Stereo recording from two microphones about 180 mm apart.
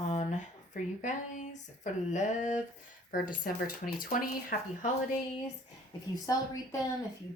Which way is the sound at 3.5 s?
50° left (ahead or behind).